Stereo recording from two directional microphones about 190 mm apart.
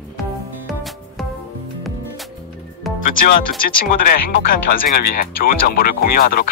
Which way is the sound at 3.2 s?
50° left (ahead or behind).